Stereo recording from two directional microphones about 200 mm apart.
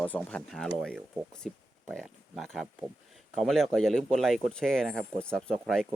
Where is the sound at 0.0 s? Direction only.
5° left (ahead or behind).